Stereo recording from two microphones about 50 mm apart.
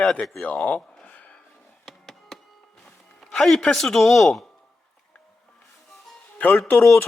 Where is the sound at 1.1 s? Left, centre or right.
Left.